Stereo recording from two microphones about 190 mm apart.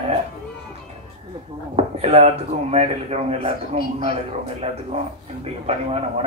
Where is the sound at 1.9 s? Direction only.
30° right (ahead or behind).